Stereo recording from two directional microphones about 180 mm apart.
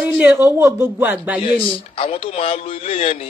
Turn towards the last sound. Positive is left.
turn(degrees=35)  # may be behind; listen again after turning